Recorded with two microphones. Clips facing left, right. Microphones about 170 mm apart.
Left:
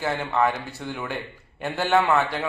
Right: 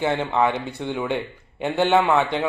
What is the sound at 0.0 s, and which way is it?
A man's voice, 20° right (ahead or behind).